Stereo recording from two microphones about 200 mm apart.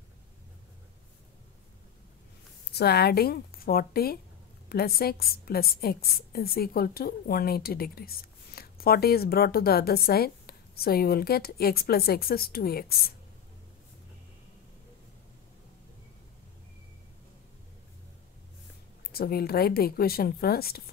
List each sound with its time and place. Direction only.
2.7 s a woman's voice: 55° left (ahead or behind)
19.1 s a woman's voice: 50° left (ahead or behind)